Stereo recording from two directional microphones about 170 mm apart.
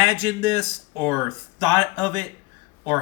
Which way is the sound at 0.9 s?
10° left (ahead or behind).